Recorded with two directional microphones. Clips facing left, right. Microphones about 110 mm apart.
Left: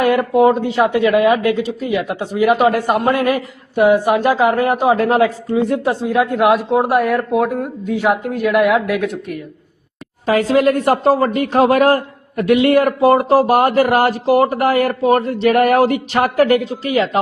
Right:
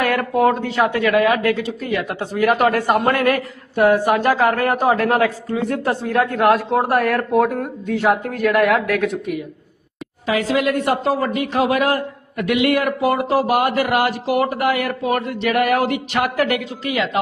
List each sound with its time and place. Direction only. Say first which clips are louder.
0.0 s a woman's voice: left 4 dB; 25° left (ahead or behind); by 9.4 s centre (ahead or behind)
10.2 s speech: left 5 dB; 40° left (ahead or behind)